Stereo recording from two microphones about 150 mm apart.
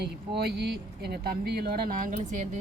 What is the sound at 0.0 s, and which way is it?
A woman's voice, 90° right.